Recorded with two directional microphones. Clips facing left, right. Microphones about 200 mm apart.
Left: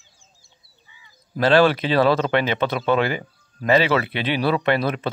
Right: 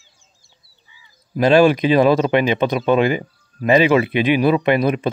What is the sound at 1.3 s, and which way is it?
Speech, 15° right (ahead or behind).